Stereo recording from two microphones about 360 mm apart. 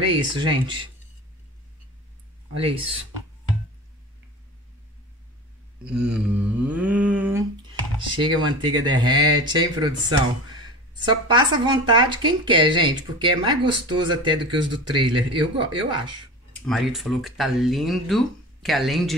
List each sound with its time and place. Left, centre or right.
0.1 s speech: centre
2.5 s speech: centre
5.9 s speech: centre
8.5 s speech: centre
16.6 s speech: centre